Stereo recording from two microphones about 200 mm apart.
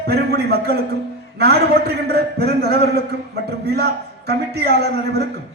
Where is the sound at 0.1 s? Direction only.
55° right (ahead or behind).